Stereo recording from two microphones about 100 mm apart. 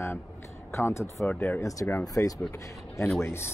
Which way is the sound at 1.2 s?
15° left (ahead or behind).